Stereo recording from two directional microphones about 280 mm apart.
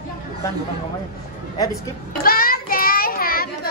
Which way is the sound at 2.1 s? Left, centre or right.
Left.